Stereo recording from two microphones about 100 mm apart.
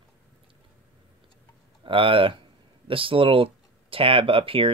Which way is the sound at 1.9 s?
60° right (ahead or behind).